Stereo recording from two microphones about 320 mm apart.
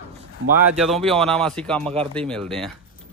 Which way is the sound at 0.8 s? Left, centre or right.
Centre.